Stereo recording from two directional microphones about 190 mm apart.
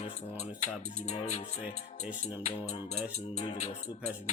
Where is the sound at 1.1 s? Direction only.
35° left (ahead or behind).